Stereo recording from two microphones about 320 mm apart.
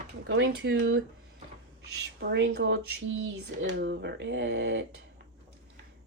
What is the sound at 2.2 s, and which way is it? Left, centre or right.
Speech, right.